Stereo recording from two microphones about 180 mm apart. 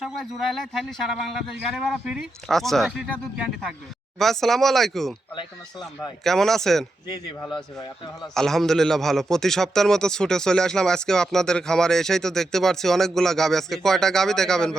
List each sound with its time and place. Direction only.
0.0 s a man's voice: centre (ahead or behind)
7.5 s speech: 25° left (ahead or behind)
8.4 s a man's voice: centre (ahead or behind)